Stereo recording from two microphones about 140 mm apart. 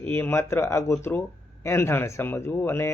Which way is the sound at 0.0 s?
15° left (ahead or behind).